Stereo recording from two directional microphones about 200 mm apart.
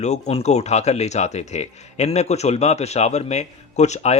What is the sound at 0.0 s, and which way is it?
Speech, 35° left (ahead or behind).